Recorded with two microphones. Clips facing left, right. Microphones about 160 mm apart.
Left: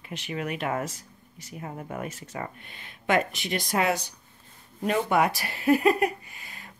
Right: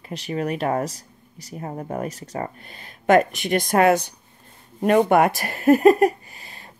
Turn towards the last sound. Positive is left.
turn(degrees=-35)  # may be behind; listen again after turning